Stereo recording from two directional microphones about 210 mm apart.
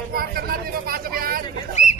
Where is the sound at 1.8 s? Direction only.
35° left (ahead or behind).